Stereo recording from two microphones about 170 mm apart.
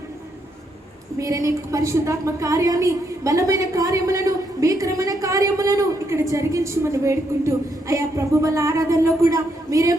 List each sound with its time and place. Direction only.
1.2 s a woman's voice: 20° right (ahead or behind)